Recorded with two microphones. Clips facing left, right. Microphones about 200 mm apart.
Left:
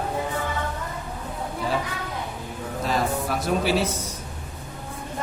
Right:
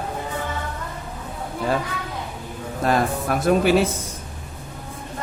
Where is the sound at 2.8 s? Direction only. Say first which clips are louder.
Right 4 dB; 55° right (ahead or behind).